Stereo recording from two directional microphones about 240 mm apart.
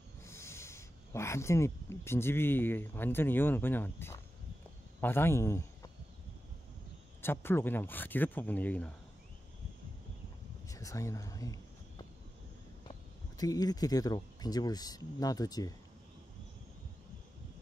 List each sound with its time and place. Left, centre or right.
0.2 s speech: centre
7.2 s speech: centre
10.7 s a sound: centre
13.4 s speech: centre